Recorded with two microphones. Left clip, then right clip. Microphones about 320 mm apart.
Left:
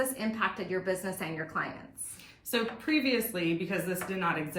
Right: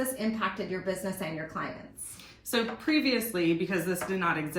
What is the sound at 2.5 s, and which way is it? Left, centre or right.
Speech, centre.